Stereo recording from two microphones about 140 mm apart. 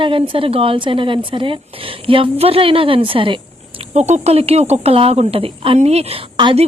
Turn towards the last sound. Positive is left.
turn(degrees=-35)  # may be behind; listen again after turning